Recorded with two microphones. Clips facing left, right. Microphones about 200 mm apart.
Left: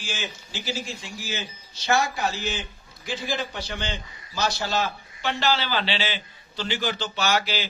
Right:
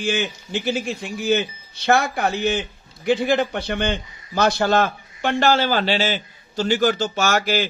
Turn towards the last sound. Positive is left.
turn(degrees=-50)  # may be behind; listen again after turning